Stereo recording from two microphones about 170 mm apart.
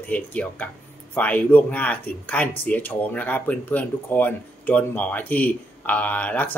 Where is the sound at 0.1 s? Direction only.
10° left (ahead or behind).